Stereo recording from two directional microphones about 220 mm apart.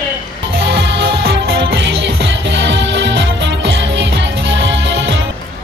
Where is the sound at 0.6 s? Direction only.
55° right (ahead or behind).